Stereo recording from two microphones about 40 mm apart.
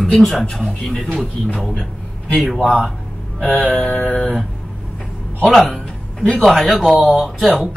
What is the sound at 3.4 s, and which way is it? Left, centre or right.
Mantra, left.